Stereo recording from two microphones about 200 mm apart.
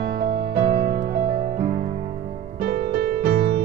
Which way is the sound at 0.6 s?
30° right (ahead or behind).